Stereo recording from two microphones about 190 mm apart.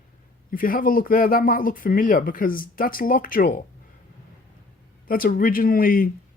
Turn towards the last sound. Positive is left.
turn(degrees=50)  # may be behind; listen again after turning